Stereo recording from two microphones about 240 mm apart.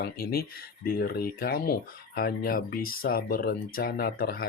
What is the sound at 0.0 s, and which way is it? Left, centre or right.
Speech, left.